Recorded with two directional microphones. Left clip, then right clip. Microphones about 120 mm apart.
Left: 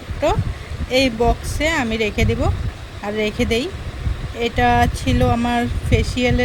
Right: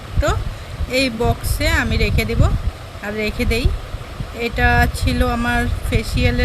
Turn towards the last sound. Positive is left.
turn(degrees=10)  # may be behind; listen again after turning